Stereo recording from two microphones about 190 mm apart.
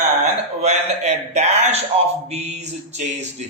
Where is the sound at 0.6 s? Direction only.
35° right (ahead or behind).